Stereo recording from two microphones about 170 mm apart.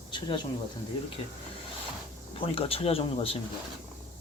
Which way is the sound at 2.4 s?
35° left (ahead or behind).